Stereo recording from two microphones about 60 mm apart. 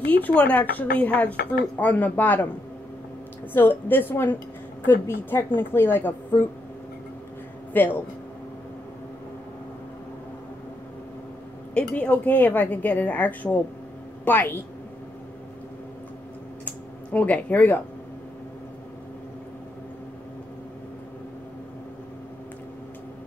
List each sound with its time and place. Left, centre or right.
0.0 s a woman's voice: left
3.5 s a woman's voice: left
7.7 s speech: left
11.7 s a woman's voice: left
17.1 s a woman's voice: left